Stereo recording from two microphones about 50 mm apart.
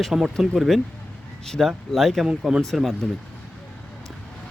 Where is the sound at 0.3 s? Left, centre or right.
Centre.